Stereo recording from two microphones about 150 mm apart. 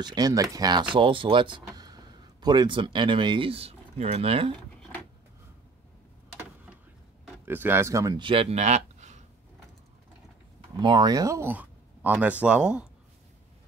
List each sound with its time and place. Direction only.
0.0 s speech: 25° right (ahead or behind)
7.4 s speech: 15° right (ahead or behind); by 9.2 s 50° right (ahead or behind)
10.8 s speech: 30° right (ahead or behind); by 12.8 s 5° right (ahead or behind)